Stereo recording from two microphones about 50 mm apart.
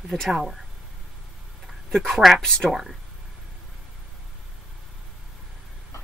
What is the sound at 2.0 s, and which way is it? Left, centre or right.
Speech, centre.